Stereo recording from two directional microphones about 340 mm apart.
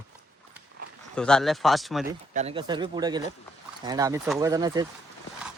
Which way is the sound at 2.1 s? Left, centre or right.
Centre.